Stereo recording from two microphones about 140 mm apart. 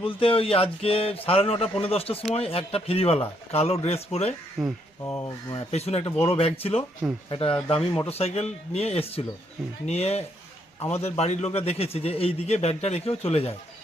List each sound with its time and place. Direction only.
0.0 s speech: 40° left (ahead or behind)
4.6 s speech: 5° right (ahead or behind)
5.0 s speech: 15° left (ahead or behind)
5.7 s speech: 45° left (ahead or behind)
7.8 s speech: 10° left (ahead or behind)
8.1 s speech: 50° left (ahead or behind)